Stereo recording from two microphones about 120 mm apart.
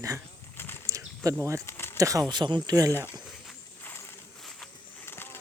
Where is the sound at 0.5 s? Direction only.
20° left (ahead or behind).